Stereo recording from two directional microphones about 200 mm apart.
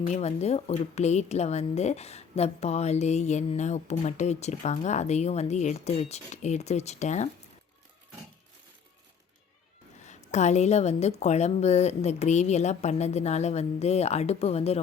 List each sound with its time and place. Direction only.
0.1 s a woman's voice: 35° left (ahead or behind)
10.0 s a woman's voice: 35° left (ahead or behind)